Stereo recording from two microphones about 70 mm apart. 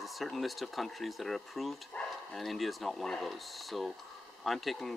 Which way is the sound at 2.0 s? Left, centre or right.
Centre.